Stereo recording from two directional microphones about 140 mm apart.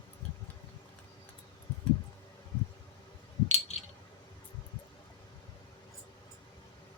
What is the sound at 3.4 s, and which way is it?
Coin, 50° left (ahead or behind).